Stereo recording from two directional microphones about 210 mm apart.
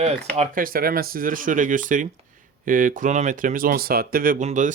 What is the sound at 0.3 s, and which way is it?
Speech, 40° right (ahead or behind).